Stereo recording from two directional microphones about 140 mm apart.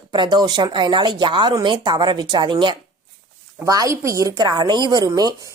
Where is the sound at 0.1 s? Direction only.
30° right (ahead or behind).